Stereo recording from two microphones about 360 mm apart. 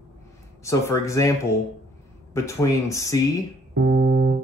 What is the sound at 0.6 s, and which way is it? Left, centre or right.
Speech, centre.